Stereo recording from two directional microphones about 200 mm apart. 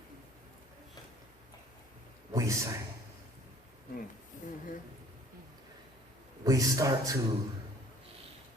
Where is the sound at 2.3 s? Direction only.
15° right (ahead or behind).